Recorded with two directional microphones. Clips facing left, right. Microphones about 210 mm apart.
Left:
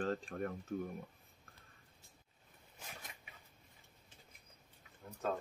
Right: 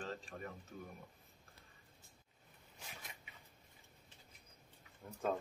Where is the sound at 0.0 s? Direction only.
55° left (ahead or behind).